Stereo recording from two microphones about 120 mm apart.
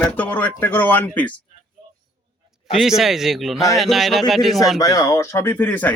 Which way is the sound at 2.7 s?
Centre (ahead or behind).